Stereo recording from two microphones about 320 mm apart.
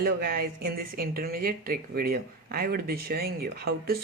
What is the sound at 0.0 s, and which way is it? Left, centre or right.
Speech, right.